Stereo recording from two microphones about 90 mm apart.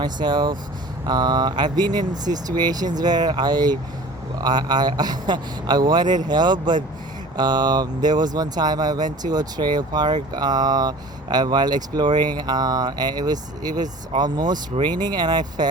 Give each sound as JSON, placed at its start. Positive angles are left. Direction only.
{"t": 0.0, "sound": "speech", "side_deg": -55}